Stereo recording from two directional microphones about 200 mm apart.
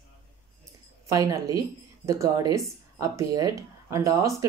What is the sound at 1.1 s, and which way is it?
Speech, 15° right (ahead or behind).